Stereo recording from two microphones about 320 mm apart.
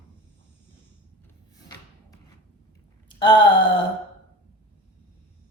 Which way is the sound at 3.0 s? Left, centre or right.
Centre.